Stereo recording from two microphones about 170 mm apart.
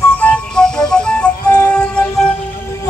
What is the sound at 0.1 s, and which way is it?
Music, 10° left (ahead or behind).